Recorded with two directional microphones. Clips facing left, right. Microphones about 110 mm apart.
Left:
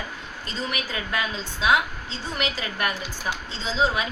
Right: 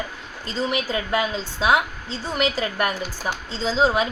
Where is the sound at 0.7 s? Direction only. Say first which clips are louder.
Right 6 dB; 30° right (ahead or behind).